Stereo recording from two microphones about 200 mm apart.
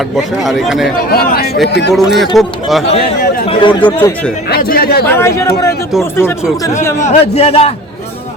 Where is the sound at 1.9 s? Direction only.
Centre (ahead or behind).